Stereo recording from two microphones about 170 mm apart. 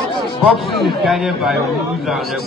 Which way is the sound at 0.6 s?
Centre (ahead or behind).